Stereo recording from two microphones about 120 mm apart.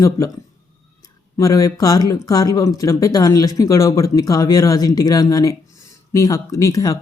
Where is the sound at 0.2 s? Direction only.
25° left (ahead or behind).